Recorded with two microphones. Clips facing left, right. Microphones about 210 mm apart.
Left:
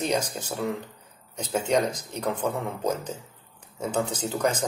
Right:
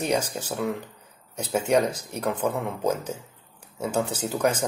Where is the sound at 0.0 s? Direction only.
10° right (ahead or behind).